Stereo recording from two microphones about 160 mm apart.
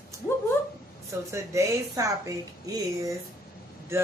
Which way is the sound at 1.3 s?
20° right (ahead or behind).